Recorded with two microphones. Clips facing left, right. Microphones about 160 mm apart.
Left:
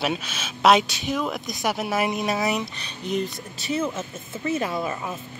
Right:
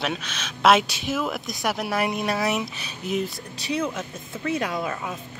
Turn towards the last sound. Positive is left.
turn(degrees=0)  # may be behind; listen again after turning